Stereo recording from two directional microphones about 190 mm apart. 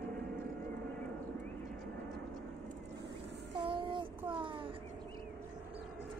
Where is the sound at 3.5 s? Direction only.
25° right (ahead or behind).